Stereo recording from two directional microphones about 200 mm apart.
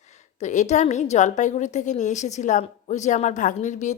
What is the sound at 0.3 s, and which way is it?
A woman's voice, 35° left (ahead or behind).